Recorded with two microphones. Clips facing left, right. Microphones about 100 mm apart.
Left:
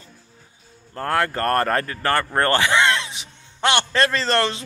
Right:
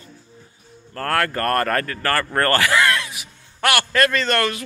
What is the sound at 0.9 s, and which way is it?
A man's voice, 20° left (ahead or behind).